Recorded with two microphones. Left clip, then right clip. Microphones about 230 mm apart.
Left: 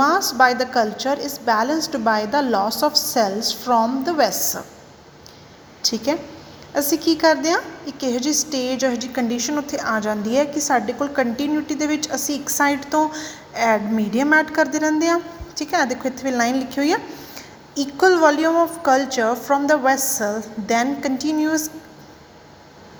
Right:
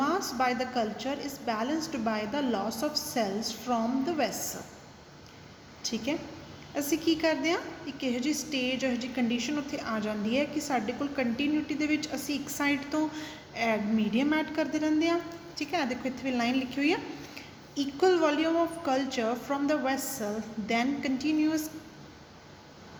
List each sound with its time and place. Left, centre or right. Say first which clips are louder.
0.0 s a woman's voice: left 13 dB; left
6.7 s a woman's voice: left 9 dB; left